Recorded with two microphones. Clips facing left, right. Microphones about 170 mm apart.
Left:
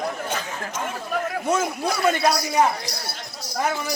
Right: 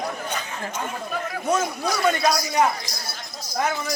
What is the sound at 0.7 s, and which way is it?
Chatter, 65° left (ahead or behind).